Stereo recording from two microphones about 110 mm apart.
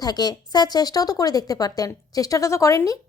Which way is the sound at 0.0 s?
35° left (ahead or behind).